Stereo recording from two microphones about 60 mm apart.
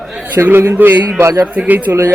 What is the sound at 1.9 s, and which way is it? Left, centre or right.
Speech, right.